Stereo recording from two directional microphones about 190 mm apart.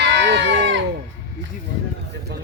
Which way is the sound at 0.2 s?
70° right (ahead or behind).